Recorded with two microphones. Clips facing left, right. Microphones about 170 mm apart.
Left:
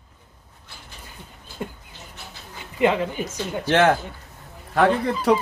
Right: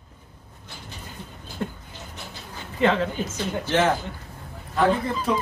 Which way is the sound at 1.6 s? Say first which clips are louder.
Right 2 dB; 10° left (ahead or behind).